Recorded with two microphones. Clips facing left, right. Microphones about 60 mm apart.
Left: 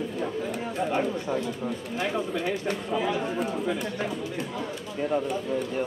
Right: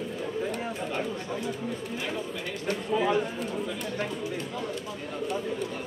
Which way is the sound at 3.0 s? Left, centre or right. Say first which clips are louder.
Right 2 dB; centre.